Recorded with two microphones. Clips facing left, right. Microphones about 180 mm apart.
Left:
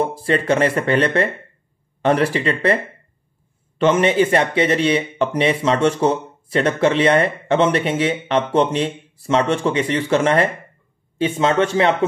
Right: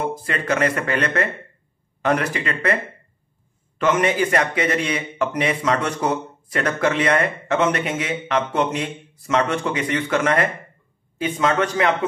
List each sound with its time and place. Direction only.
0.0 s a man's voice: 30° left (ahead or behind)